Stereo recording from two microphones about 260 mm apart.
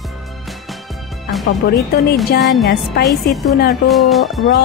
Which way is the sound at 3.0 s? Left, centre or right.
Left.